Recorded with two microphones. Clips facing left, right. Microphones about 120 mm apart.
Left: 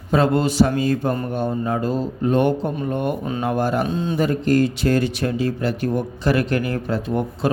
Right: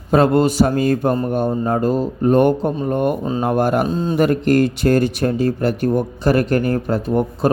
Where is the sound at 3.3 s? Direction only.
35° right (ahead or behind).